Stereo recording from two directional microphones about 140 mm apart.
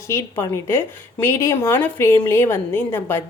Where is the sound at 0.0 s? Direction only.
20° left (ahead or behind).